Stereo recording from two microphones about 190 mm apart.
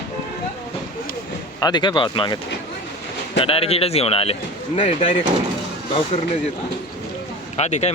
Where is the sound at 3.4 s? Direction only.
30° left (ahead or behind).